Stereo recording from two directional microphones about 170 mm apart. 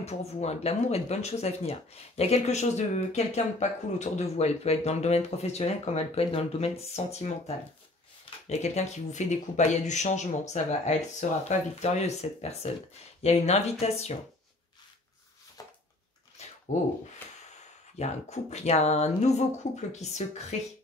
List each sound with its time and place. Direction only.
0.0 s speech: 40° left (ahead or behind)
17.9 s speech: 40° left (ahead or behind)